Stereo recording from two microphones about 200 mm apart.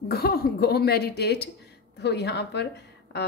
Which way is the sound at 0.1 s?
50° left (ahead or behind).